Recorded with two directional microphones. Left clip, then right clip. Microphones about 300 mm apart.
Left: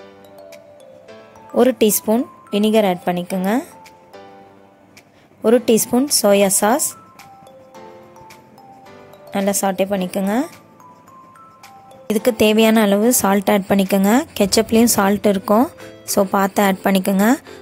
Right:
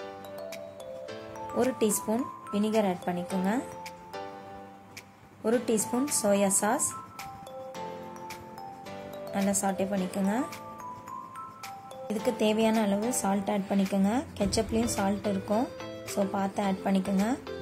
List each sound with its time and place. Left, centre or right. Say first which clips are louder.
1.6 s a woman's voice: left 13 dB; left
5.7 s a woman's voice: left 13 dB; left
9.3 s a woman's voice: left 11 dB; left
12.1 s a woman's voice: left 13 dB; left